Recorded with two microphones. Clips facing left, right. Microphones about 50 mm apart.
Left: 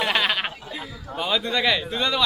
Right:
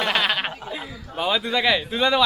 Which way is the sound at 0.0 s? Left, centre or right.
Centre.